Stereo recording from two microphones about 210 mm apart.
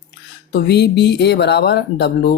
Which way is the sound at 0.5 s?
50° left (ahead or behind).